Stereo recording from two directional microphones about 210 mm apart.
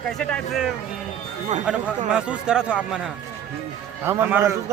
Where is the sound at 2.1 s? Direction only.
5° right (ahead or behind).